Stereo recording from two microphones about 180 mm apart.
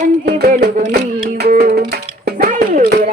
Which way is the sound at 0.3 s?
60° right (ahead or behind).